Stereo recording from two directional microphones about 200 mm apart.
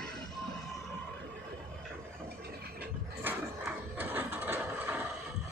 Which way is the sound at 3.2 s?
10° right (ahead or behind).